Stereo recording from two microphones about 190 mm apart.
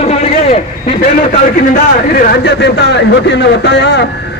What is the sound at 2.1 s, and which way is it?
Speech, 55° left (ahead or behind).